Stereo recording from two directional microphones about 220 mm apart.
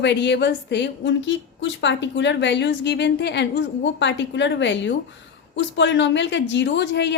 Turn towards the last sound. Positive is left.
turn(degrees=50)  # may be behind; listen again after turning